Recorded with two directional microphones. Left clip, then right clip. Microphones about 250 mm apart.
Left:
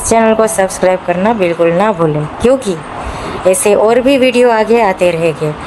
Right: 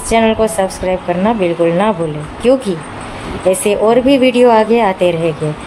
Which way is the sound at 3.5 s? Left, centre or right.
Centre.